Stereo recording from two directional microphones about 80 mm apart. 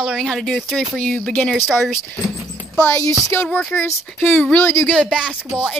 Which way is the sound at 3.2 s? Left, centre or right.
Left.